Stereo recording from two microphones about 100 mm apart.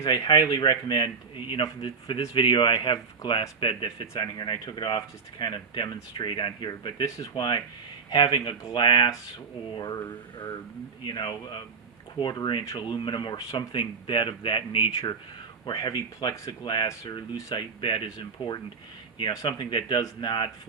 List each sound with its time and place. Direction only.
0.0 s speech: 40° left (ahead or behind); by 4.1 s 60° left (ahead or behind)
4.1 s speech: 45° left (ahead or behind)
11.0 s speech: 50° left (ahead or behind)